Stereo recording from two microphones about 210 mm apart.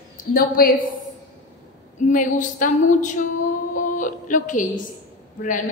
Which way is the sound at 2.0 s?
40° left (ahead or behind).